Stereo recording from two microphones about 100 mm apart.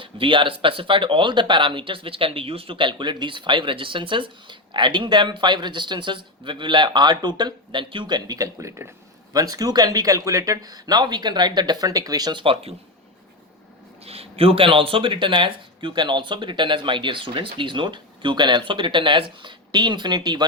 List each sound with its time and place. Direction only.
0.0 s speech: 55° right (ahead or behind)
14.0 s a woman's voice: 80° right; by 20.4 s 45° right (ahead or behind)